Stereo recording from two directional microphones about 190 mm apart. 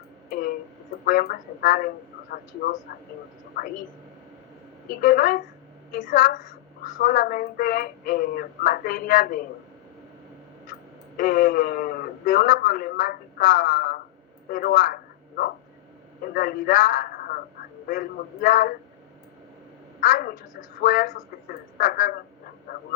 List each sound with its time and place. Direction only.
1.0 s speech: 50° left (ahead or behind)
4.9 s a woman's voice: 50° left (ahead or behind)
11.2 s a man's voice: 50° left (ahead or behind)
20.0 s speech: 45° left (ahead or behind)